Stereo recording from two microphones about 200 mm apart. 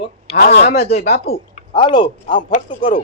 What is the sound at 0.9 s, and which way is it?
A woman's voice, 30° left (ahead or behind).